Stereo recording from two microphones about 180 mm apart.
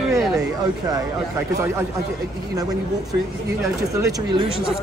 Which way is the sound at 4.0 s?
20° right (ahead or behind).